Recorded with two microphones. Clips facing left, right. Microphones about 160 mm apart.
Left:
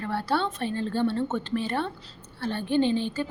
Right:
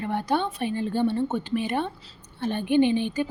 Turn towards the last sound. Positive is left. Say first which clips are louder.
# right 3 dB
turn(degrees=-15)  # may be behind; listen again after turning